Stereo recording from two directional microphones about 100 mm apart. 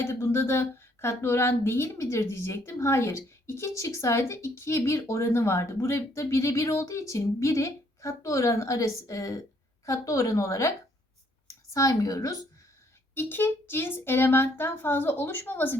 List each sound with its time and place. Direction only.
0.0 s a woman's voice: 25° left (ahead or behind)
13.1 s a woman's voice: 20° left (ahead or behind)